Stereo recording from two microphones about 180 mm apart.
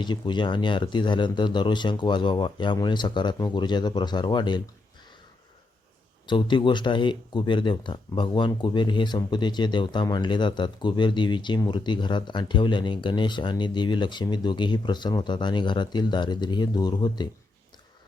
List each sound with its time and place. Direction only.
0.0 s speech: 25° left (ahead or behind)
6.2 s speech: 25° left (ahead or behind)